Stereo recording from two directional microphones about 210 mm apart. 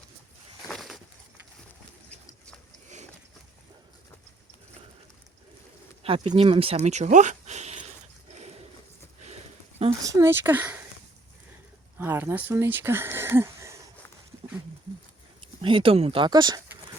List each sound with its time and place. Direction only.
0.7 s a sound: centre (ahead or behind)
6.0 s speech: 25° right (ahead or behind)
9.2 s a sound: 30° right (ahead or behind)
10.0 s speech: 15° right (ahead or behind)
11.9 s speech: 10° right (ahead or behind)
15.6 s speech: 25° right (ahead or behind)